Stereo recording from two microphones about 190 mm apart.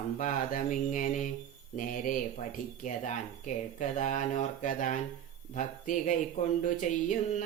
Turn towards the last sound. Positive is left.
turn(degrees=40)  # may be behind; listen again after turning